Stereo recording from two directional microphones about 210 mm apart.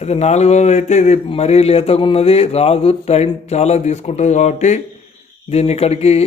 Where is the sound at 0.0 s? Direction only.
30° left (ahead or behind).